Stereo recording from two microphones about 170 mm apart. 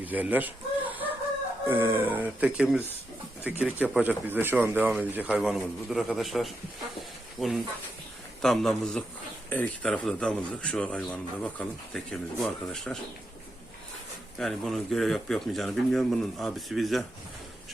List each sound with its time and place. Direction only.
0.0 s chicken: 10° right (ahead or behind)
1.6 s a man's voice: 15° right (ahead or behind); by 13.0 s centre (ahead or behind)
14.3 s speech: centre (ahead or behind)